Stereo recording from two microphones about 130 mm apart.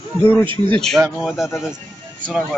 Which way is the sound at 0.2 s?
15° left (ahead or behind).